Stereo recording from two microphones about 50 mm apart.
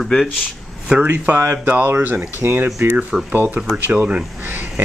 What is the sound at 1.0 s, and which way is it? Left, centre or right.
Speech, right.